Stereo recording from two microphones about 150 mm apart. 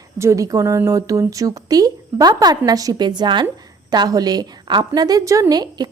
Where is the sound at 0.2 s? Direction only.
20° right (ahead or behind).